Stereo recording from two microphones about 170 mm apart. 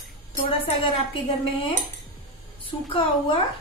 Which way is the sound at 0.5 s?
30° left (ahead or behind).